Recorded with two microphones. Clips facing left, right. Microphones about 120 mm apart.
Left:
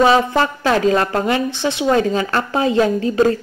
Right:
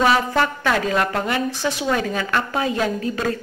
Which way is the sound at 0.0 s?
25° left (ahead or behind).